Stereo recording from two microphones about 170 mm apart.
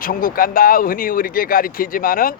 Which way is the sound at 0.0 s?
55° left (ahead or behind).